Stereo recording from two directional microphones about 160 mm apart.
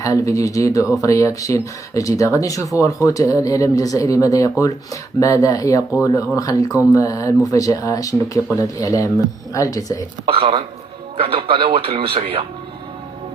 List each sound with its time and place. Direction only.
0.0 s speech: 20° left (ahead or behind)
10.2 s speech: 35° right (ahead or behind)